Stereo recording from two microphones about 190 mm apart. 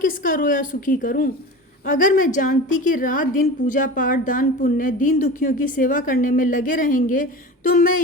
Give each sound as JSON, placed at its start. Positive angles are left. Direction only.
{"t": 0.0, "sound": "a woman's voice", "side_deg": 45}